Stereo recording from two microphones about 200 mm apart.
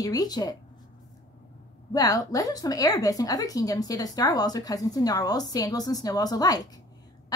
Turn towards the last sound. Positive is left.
turn(degrees=20)  # may be behind; listen again after turning